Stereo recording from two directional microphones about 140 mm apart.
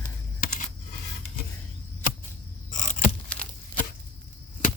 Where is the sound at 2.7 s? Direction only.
65° left (ahead or behind).